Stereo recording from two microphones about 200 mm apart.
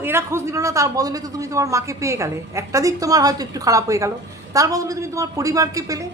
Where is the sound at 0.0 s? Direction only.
10° right (ahead or behind).